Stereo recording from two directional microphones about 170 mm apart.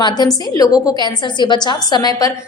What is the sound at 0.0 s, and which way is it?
A woman's voice, 25° left (ahead or behind).